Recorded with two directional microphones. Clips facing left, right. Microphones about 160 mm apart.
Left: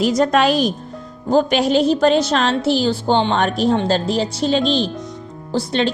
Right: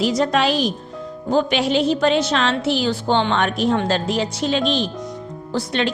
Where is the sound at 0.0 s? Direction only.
45° left (ahead or behind).